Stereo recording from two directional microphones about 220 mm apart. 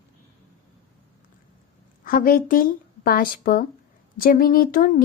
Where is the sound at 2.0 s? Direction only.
40° left (ahead or behind).